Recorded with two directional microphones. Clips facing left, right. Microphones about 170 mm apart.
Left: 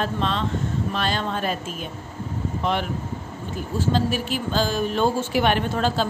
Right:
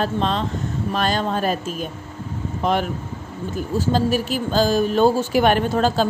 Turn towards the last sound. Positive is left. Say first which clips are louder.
# right 4 dB
turn(degrees=-40)  # may be behind; listen again after turning